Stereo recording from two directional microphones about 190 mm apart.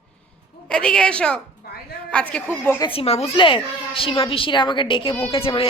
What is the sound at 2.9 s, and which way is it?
A child's voice, 30° left (ahead or behind).